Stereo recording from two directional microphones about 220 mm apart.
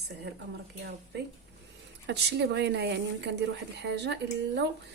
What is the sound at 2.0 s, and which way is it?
Speech, 50° right (ahead or behind).